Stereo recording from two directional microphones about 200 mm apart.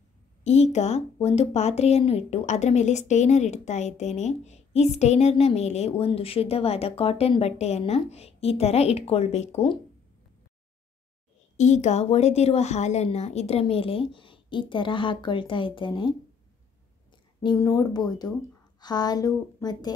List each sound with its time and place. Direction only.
0.4 s a woman's voice: 35° left (ahead or behind)
11.5 s a woman's voice: 35° left (ahead or behind)
17.4 s a woman's voice: 20° left (ahead or behind)